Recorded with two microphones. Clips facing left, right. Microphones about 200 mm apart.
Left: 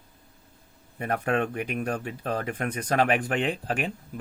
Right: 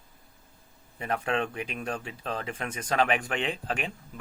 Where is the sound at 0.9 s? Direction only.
45° left (ahead or behind).